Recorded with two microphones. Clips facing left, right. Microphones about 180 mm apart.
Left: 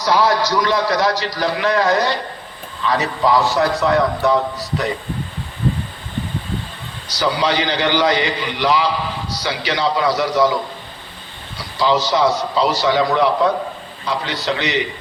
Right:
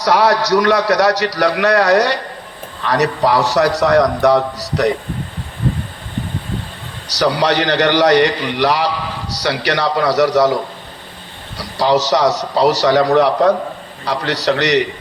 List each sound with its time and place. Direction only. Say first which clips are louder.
0.0 s a man's voice: right 2 dB; 70° right (ahead or behind)
7.1 s a man's voice: right 3 dB; 75° right (ahead or behind)
11.5 s a man's voice: right 3 dB; 75° right (ahead or behind)